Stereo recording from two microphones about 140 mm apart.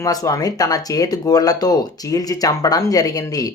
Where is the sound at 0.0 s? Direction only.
25° left (ahead or behind).